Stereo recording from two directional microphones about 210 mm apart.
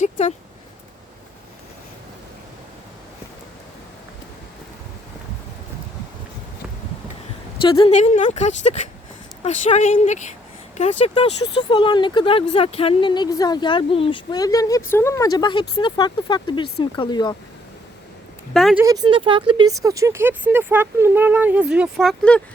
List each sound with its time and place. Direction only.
0.0 s speech: 35° left (ahead or behind)
7.6 s speech: 25° left (ahead or behind)
18.5 s speech: centre (ahead or behind)
18.8 s speech: 15° right (ahead or behind); by 22.4 s centre (ahead or behind)